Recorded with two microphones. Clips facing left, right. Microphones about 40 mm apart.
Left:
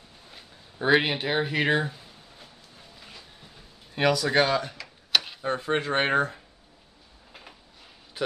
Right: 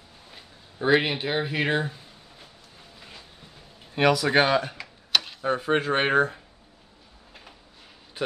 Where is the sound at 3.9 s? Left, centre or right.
Centre.